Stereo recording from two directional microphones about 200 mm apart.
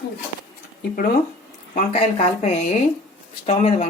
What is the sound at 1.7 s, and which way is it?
Speech, 35° left (ahead or behind).